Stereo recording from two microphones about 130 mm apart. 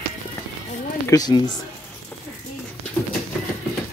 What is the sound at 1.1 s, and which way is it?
Speech, 30° left (ahead or behind).